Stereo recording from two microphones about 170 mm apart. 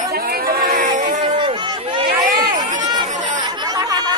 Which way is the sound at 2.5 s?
45° right (ahead or behind).